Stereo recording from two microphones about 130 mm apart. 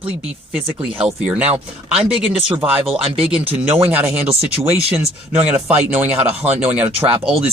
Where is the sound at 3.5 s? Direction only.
15° right (ahead or behind).